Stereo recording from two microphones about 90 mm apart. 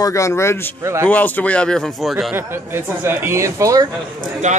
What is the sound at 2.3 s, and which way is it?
Speech, 25° right (ahead or behind).